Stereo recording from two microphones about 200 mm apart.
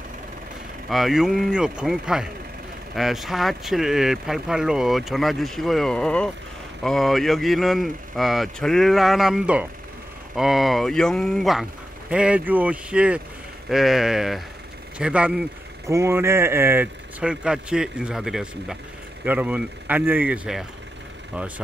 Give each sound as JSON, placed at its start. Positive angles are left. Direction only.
{"t": 0.8, "sound": "speech", "side_deg": 0}